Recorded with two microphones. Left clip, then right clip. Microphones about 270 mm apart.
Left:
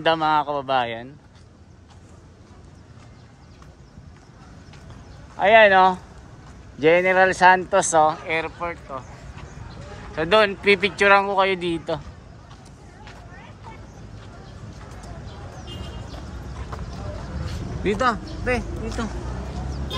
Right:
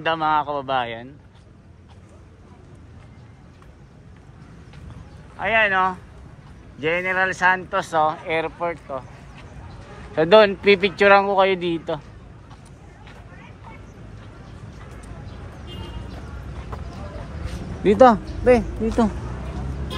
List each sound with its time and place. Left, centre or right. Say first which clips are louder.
0.0 s speech: left 1 dB; centre
5.4 s speech: left 5 dB; centre
10.1 s speech: right 4 dB; centre
17.9 s speech: right 10 dB; centre